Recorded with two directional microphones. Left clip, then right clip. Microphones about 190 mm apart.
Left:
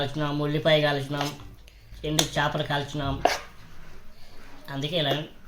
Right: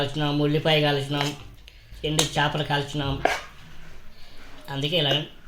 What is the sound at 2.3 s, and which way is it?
Speech, 35° right (ahead or behind).